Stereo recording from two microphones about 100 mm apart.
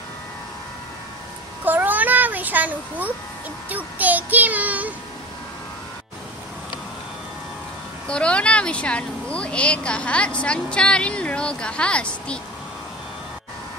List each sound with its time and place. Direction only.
1.6 s child singing: 15° right (ahead or behind)
3.6 s a child's voice: 15° right (ahead or behind)
8.1 s speech: 10° left (ahead or behind)